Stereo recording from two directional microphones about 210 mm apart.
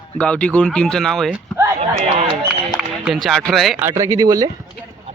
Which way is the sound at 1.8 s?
30° right (ahead or behind).